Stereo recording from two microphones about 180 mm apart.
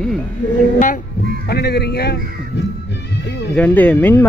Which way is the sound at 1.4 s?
65° left (ahead or behind).